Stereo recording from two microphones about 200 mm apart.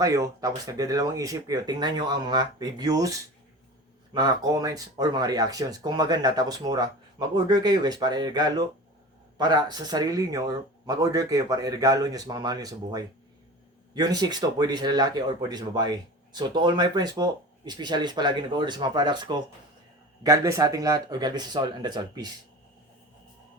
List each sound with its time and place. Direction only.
0.0 s speech: 15° right (ahead or behind)